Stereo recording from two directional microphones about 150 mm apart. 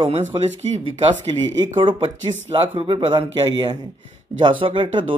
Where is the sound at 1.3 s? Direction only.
30° right (ahead or behind).